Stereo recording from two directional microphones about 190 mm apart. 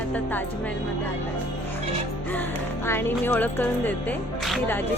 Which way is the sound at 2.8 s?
10° left (ahead or behind).